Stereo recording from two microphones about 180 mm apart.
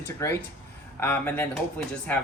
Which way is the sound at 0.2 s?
15° left (ahead or behind).